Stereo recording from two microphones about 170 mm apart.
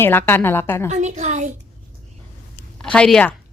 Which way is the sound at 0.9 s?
45° right (ahead or behind).